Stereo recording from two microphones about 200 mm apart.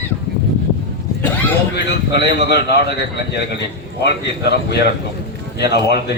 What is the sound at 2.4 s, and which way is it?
Speech, 55° left (ahead or behind).